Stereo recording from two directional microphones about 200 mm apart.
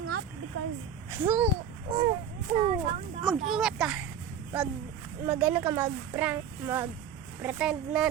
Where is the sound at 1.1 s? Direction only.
10° right (ahead or behind).